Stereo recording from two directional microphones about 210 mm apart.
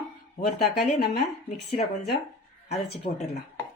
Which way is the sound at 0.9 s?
40° left (ahead or behind).